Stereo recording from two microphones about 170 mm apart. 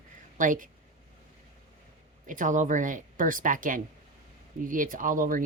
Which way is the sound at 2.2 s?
50° right (ahead or behind).